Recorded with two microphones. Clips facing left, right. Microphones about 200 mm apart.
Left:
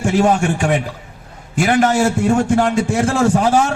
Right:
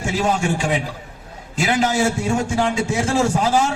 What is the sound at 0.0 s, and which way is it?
A man's voice, 55° left (ahead or behind).